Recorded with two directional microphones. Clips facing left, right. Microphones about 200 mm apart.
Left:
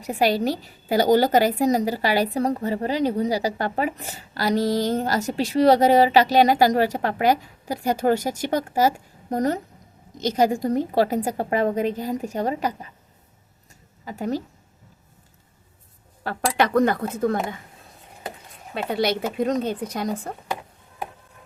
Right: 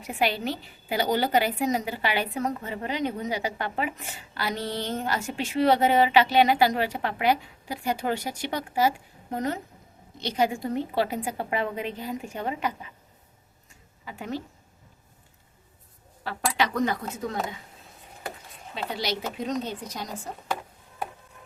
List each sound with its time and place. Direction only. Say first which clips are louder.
0.0 s a woman's voice: left 6 dB; 40° left (ahead or behind)
14.0 s a woman's voice: left 7 dB; 40° left (ahead or behind)
16.4 s speech: left 6 dB; 55° left (ahead or behind)
18.7 s speech: left 7 dB; 55° left (ahead or behind)